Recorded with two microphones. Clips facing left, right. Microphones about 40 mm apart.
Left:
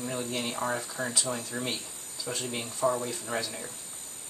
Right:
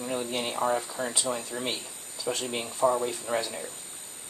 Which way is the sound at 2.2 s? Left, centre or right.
Right.